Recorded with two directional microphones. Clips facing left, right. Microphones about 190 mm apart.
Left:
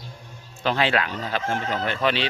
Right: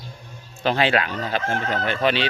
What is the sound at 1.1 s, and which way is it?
Speech, 60° right (ahead or behind).